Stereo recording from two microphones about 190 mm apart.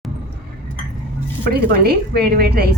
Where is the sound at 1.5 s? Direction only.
55° right (ahead or behind).